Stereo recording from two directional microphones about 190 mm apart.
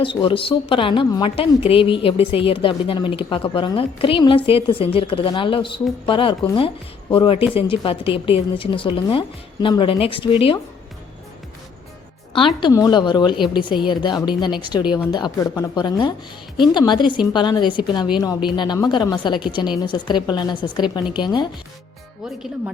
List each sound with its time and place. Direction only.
0.0 s a woman's voice: 25° left (ahead or behind)
12.5 s a woman's voice: 20° left (ahead or behind)